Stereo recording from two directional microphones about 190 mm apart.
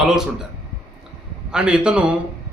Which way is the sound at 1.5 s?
5° right (ahead or behind).